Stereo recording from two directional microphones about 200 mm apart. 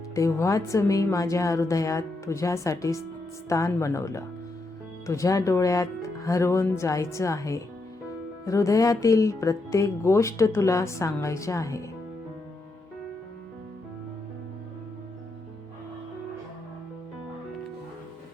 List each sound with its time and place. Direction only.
0.1 s speech: 15° left (ahead or behind)